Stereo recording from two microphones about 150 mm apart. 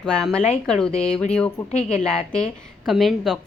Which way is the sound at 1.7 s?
45° left (ahead or behind).